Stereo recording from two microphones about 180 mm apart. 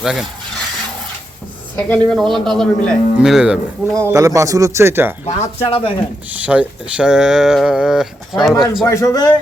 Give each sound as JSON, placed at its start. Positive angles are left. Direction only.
{"t": 0.0, "sound": "speech", "side_deg": 0}
{"t": 1.7, "sound": "speech", "side_deg": 10}
{"t": 4.0, "sound": "a man's voice", "side_deg": -20}
{"t": 5.2, "sound": "speech", "side_deg": 35}
{"t": 6.4, "sound": "speech", "side_deg": -5}
{"t": 8.9, "sound": "a man's voice", "side_deg": 15}